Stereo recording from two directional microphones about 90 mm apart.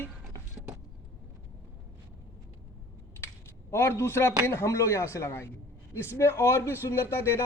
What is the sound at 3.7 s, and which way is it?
A man's voice, 25° left (ahead or behind).